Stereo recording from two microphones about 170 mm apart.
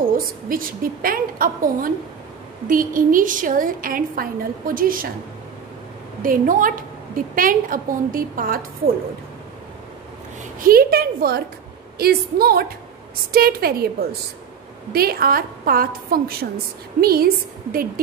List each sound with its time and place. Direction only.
0.0 s a woman's voice: 55° right (ahead or behind)
6.2 s a woman's voice: 55° right (ahead or behind)
10.6 s a woman's voice: 60° right (ahead or behind)
14.9 s a woman's voice: 65° right (ahead or behind)